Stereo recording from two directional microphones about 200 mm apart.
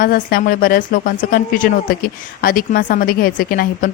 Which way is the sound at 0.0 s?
45° left (ahead or behind).